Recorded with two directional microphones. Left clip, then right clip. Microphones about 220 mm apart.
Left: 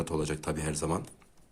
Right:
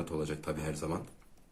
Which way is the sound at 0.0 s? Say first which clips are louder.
Left 4 dB; 30° left (ahead or behind).